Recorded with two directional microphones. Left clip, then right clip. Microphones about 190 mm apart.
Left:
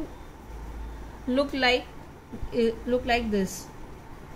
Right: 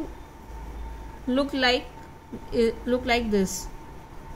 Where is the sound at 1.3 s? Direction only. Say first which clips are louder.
Right 1 dB; 10° right (ahead or behind).